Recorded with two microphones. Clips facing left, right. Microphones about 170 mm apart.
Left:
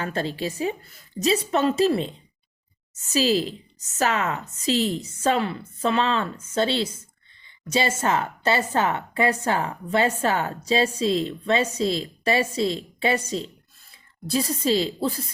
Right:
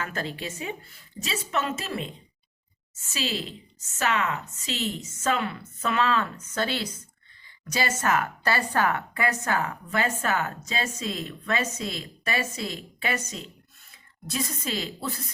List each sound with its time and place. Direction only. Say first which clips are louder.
0.0 s a woman's voice: left 5 dB; 30° left (ahead or behind)